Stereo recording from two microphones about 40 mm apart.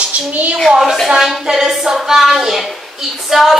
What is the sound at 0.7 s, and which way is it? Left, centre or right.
A woman's voice, centre.